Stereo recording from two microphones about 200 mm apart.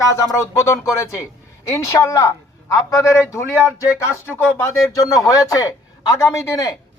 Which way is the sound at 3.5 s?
5° right (ahead or behind).